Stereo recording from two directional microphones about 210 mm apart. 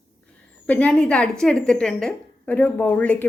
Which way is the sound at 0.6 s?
5° left (ahead or behind).